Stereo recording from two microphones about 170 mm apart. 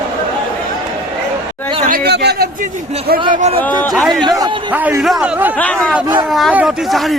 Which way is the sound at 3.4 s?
40° right (ahead or behind).